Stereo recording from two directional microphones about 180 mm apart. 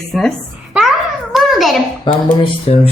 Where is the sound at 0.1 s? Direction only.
Centre (ahead or behind).